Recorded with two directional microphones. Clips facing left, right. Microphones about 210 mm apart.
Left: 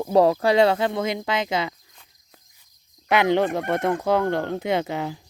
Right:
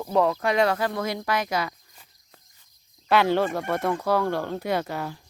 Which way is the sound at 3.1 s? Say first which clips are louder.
Left 2 dB; 20° left (ahead or behind).